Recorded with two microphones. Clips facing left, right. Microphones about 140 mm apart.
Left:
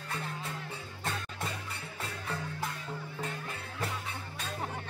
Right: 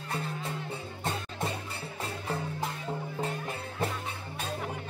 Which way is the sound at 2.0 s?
30° right (ahead or behind).